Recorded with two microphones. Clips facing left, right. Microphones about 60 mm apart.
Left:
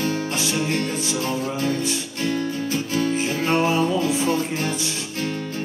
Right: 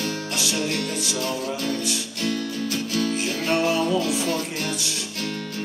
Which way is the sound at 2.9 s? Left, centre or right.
Left.